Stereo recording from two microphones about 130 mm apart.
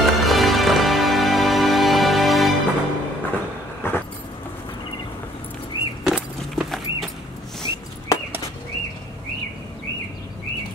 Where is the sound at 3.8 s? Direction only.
15° left (ahead or behind).